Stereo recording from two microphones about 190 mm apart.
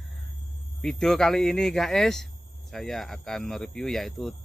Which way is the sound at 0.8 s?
5° left (ahead or behind).